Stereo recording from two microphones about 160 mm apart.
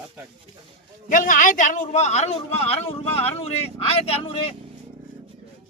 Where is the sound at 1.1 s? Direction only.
55° left (ahead or behind).